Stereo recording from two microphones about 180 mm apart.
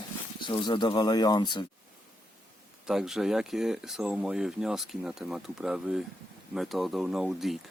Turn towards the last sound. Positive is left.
turn(degrees=0)  # may be behind; listen again after turning